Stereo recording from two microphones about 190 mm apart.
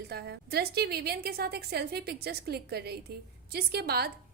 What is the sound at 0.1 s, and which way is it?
A woman's voice, 55° right (ahead or behind).